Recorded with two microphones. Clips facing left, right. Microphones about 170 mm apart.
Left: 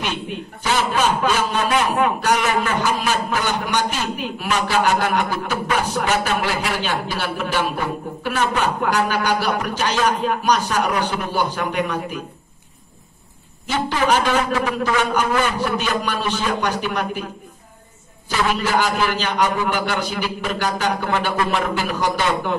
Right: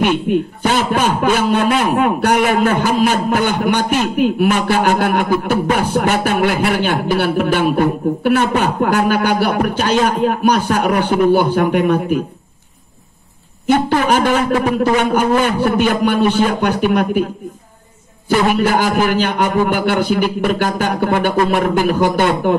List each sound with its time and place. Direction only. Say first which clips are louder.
0.0 s a man's voice: right 12 dB; 55° right (ahead or behind)
13.7 s a man's voice: right 6 dB; 55° right (ahead or behind)
18.3 s a man's voice: right 6 dB; 50° right (ahead or behind)